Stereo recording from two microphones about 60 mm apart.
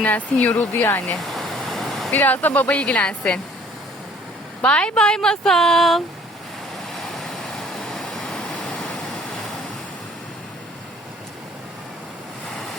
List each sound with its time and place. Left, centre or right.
0.0 s speech: left
0.7 s speech: left
1.2 s a sound: centre
2.1 s speech: left
4.6 s speech: centre
6.9 s vehicle: centre
8.8 s a sound: centre